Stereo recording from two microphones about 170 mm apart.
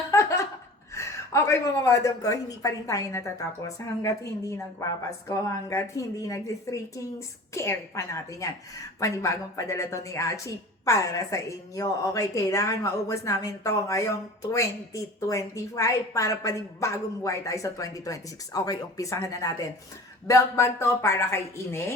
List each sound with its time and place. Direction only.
0.1 s laughter: 15° left (ahead or behind)
0.9 s a woman's voice: 15° left (ahead or behind)